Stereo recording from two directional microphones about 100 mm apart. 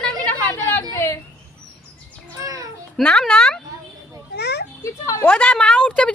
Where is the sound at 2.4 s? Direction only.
35° right (ahead or behind).